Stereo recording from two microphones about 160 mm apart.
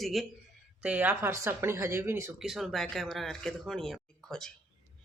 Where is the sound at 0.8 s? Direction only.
10° right (ahead or behind).